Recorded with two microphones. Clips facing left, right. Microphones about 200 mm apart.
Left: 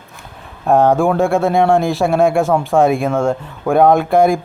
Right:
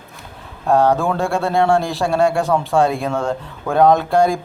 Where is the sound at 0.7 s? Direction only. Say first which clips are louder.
Left 3 dB; 15° left (ahead or behind).